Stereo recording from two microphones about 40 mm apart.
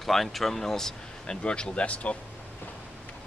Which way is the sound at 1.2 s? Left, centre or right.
Left.